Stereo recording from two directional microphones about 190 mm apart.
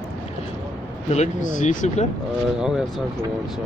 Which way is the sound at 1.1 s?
40° left (ahead or behind).